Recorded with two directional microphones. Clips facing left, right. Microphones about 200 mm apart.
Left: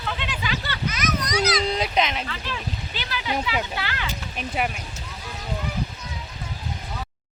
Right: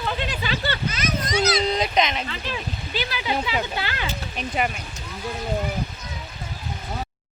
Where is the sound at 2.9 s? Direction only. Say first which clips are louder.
Right 3 dB; 10° right (ahead or behind).